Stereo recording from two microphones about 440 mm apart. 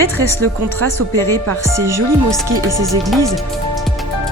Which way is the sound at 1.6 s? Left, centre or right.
Centre.